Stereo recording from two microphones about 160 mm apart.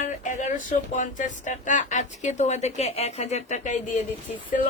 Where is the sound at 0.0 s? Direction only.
50° left (ahead or behind).